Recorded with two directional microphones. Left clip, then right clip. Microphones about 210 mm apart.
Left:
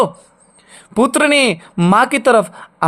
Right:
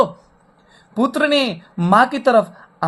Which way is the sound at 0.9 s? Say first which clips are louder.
Left 4 dB; 40° left (ahead or behind).